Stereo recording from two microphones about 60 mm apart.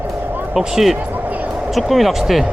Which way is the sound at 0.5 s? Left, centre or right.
Centre.